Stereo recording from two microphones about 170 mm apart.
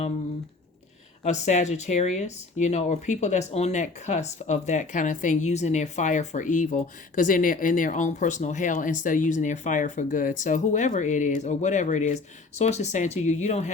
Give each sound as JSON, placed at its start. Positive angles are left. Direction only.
{"t": 1.2, "sound": "speech", "side_deg": 45}